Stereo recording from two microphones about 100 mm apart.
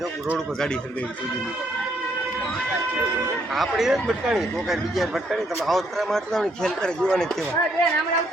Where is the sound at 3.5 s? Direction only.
Centre (ahead or behind).